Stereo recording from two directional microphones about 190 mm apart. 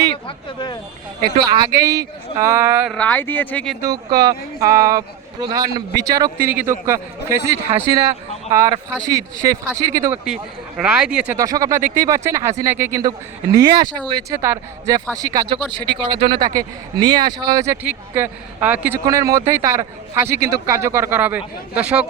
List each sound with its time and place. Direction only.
0.3 s speech: 25° left (ahead or behind)
1.4 s a man's voice: 20° right (ahead or behind)
2.9 s speech: 10° left (ahead or behind)
3.8 s a man's voice: 20° right (ahead or behind)
8.5 s a man's voice: 15° right (ahead or behind)
10.2 s speech: 5° right (ahead or behind)
11.3 s a man's voice: 20° right (ahead or behind)